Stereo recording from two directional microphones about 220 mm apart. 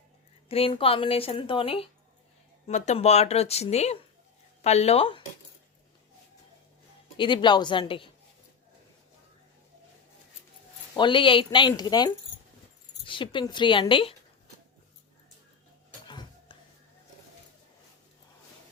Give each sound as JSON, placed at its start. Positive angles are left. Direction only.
{"t": 0.4, "sound": "a woman's voice", "side_deg": 25}
{"t": 7.2, "sound": "a woman's voice", "side_deg": 20}
{"t": 10.9, "sound": "a woman's voice", "side_deg": 20}
{"t": 16.0, "sound": "a sound", "side_deg": 20}